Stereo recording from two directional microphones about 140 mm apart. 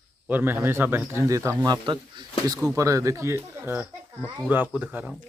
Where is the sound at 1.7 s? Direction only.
30° right (ahead or behind); by 5.1 s 10° right (ahead or behind).